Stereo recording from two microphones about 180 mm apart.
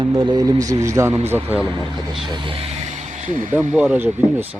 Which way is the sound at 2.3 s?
25° right (ahead or behind).